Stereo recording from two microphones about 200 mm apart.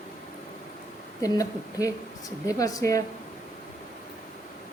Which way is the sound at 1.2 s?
15° left (ahead or behind).